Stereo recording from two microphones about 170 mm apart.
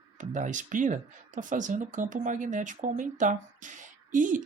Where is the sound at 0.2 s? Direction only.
50° right (ahead or behind).